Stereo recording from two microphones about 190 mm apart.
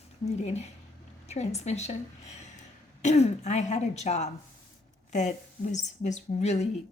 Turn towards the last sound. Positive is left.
turn(degrees=35)  # may be behind; listen again after turning